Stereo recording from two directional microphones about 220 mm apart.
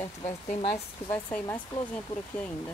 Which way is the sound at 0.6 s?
10° left (ahead or behind).